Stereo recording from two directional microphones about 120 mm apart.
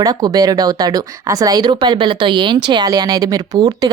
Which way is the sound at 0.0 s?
30° right (ahead or behind).